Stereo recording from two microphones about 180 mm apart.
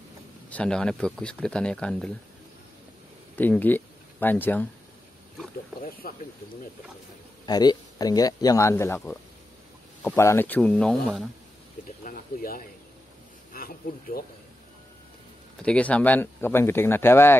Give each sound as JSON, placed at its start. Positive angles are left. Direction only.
{"t": 0.5, "sound": "speech", "side_deg": 5}
{"t": 3.3, "sound": "speech", "side_deg": 10}
{"t": 5.8, "sound": "speech", "side_deg": 55}
{"t": 7.4, "sound": "speech", "side_deg": 20}
{"t": 12.0, "sound": "speech", "side_deg": 50}
{"t": 15.6, "sound": "speech", "side_deg": 5}